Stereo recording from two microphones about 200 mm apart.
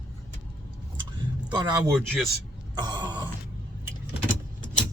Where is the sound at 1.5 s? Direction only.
20° right (ahead or behind).